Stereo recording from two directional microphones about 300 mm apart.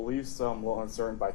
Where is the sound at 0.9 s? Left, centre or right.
Left.